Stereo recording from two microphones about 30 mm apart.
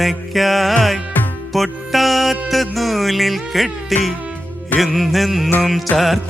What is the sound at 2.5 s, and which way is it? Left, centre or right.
Mantra, centre.